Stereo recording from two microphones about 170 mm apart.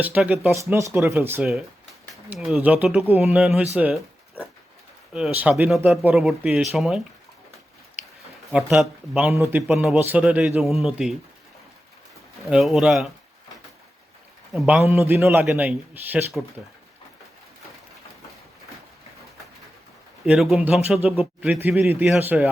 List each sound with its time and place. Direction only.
0.0 s a man's voice: 5° right (ahead or behind)
2.3 s a man's voice: centre (ahead or behind)
5.1 s speech: 5° right (ahead or behind)
8.4 s a man's voice: centre (ahead or behind)
12.4 s speech: centre (ahead or behind)
14.5 s speech: centre (ahead or behind)
14.8 s a man's voice: 15° right (ahead or behind)
20.2 s a man's voice: centre (ahead or behind)